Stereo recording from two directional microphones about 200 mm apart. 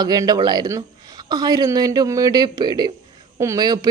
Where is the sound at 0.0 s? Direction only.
20° right (ahead or behind).